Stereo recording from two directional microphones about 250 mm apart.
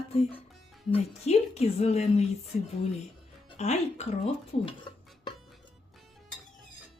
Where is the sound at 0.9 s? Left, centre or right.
Left.